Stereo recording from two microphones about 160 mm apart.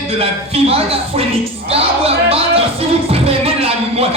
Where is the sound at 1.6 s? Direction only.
40° right (ahead or behind).